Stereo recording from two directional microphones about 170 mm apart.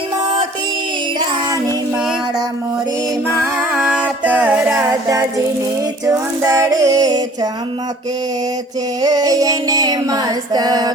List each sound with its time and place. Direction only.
3.8 s music: 5° right (ahead or behind)
4.7 s music: 20° right (ahead or behind)
6.1 s female singing: 15° right (ahead or behind)
9.0 s female singing: 20° right (ahead or behind)